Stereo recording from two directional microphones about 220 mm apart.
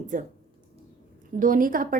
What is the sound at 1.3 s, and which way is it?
Speech, 35° right (ahead or behind).